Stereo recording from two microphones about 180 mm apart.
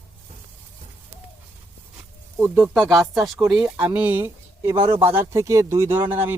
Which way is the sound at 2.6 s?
5° left (ahead or behind).